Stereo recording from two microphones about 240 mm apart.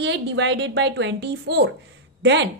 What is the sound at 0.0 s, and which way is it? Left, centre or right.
Speech, right.